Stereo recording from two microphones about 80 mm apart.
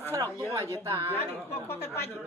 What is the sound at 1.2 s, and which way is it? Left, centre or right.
Speech, left.